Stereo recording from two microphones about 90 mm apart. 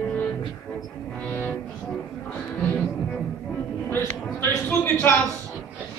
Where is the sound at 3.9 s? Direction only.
25° left (ahead or behind).